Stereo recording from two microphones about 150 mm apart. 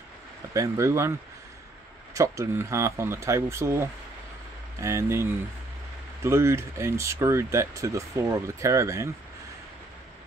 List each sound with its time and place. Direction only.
0.5 s speech: 20° right (ahead or behind)
2.1 s speech: 20° right (ahead or behind)